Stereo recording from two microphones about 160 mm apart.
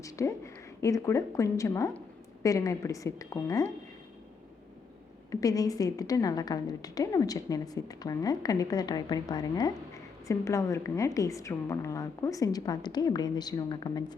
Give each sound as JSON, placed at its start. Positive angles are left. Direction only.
{"t": 0.0, "sound": "a woman's voice", "side_deg": 20}
{"t": 5.3, "sound": "a woman's voice", "side_deg": 20}